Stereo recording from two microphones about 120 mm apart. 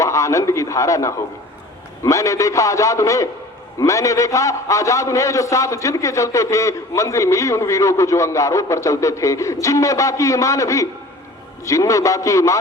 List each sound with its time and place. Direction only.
0.0 s a man's voice: 25° left (ahead or behind)